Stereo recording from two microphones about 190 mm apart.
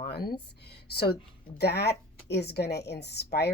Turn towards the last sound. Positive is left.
turn(degrees=60)  # may be behind; listen again after turning